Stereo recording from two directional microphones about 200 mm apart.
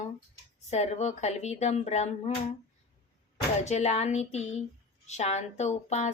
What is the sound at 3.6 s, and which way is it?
A woman's voice, 35° left (ahead or behind).